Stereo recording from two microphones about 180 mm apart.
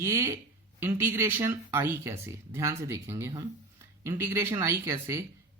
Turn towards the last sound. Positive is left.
turn(degrees=-15)  # may be behind; listen again after turning